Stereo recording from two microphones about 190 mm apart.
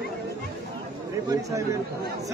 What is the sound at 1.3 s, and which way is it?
Speech, 15° right (ahead or behind).